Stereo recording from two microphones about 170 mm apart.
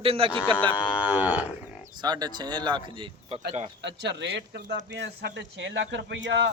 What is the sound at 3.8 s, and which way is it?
Speech, 90° right.